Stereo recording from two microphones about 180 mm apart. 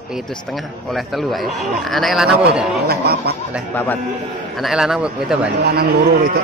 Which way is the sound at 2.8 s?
60° right (ahead or behind).